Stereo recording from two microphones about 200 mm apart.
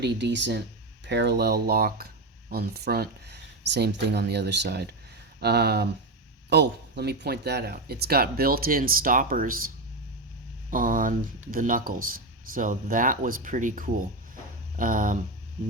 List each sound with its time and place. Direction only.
0.0 s speech: 60° right (ahead or behind); by 15.2 s 40° right (ahead or behind)